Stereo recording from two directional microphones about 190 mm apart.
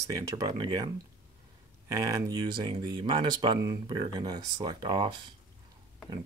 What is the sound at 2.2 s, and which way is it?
Speech, 20° right (ahead or behind).